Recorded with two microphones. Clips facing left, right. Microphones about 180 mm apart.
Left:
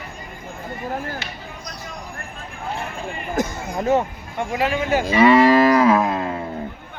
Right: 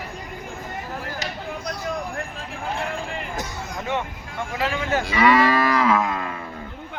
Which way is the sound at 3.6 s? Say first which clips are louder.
Left 8 dB; 35° left (ahead or behind).